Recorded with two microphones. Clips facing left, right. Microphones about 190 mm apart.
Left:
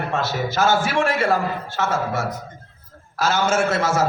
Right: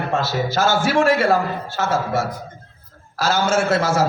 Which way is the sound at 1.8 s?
30° right (ahead or behind).